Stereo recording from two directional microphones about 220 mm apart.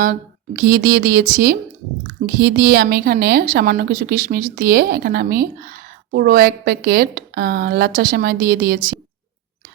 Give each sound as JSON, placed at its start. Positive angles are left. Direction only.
{"t": 0.0, "sound": "a woman's voice", "side_deg": -40}